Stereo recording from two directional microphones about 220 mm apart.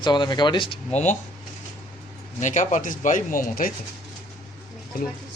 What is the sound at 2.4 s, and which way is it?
Speech, 35° left (ahead or behind).